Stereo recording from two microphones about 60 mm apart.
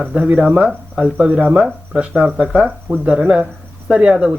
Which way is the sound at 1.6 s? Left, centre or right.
Centre.